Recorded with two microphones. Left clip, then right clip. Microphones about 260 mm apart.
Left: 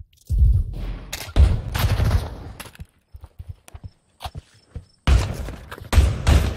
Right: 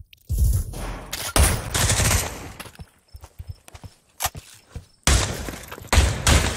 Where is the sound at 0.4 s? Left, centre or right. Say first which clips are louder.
Left 1 dB; right.